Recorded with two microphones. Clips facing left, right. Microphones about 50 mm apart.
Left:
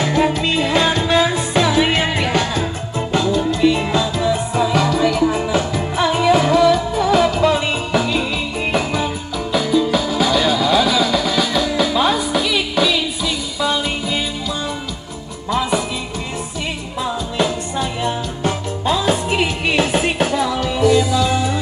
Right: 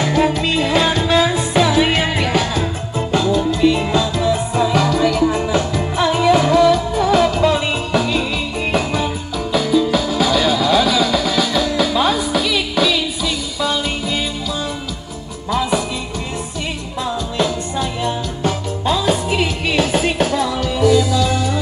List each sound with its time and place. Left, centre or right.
0.0 s music: centre
15.5 s music: centre
17.0 s music: centre